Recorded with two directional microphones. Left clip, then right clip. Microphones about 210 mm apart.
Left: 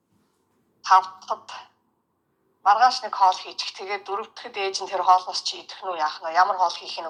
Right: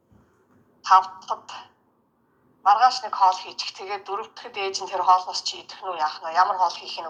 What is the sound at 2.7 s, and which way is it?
A woman's voice, 30° left (ahead or behind).